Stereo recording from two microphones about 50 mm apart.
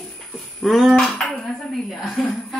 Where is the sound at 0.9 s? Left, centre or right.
Centre.